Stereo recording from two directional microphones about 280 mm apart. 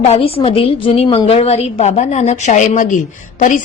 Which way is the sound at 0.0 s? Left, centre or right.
Left.